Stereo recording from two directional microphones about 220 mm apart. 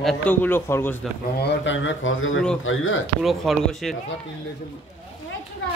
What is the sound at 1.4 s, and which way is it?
A man's voice, 55° left (ahead or behind).